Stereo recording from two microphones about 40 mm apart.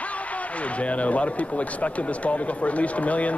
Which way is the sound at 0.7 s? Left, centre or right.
Left.